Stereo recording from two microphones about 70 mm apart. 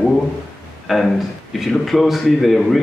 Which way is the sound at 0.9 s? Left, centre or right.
Centre.